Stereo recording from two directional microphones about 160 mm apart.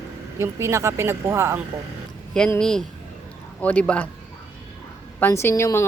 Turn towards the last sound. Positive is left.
turn(degrees=15)  # may be behind; listen again after turning